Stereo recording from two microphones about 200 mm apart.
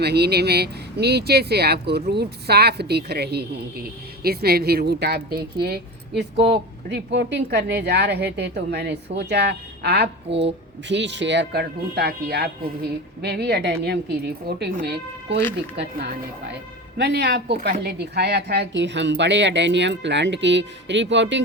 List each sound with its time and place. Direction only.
0.0 s a woman's voice: 55° right (ahead or behind)